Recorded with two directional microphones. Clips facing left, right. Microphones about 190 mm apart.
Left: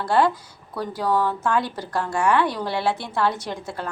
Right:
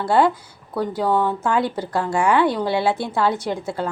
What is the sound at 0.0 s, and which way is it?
Speech, 25° right (ahead or behind).